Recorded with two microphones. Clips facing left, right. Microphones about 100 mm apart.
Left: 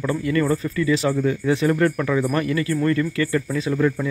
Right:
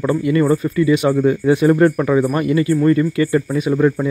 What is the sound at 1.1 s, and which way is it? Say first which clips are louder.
Speech: right 6 dB; 30° right (ahead or behind).